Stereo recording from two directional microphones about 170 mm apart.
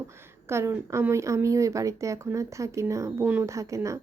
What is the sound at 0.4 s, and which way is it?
A woman's voice, 15° right (ahead or behind).